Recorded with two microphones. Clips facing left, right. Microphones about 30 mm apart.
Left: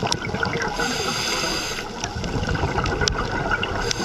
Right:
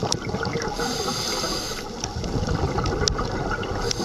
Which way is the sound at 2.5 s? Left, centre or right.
Left.